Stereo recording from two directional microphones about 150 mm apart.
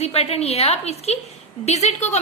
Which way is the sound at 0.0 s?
45° left (ahead or behind).